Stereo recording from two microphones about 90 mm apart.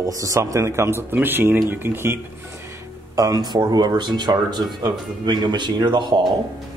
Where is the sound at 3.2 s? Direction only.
45° right (ahead or behind).